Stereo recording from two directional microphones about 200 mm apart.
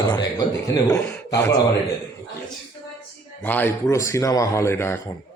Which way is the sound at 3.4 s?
10° left (ahead or behind).